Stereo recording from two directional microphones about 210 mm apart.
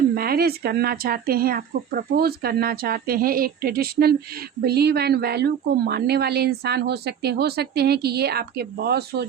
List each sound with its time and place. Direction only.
0.1 s a woman's voice: 45° right (ahead or behind)